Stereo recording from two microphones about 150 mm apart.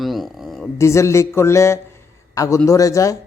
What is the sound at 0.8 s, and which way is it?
A man's voice, 20° left (ahead or behind).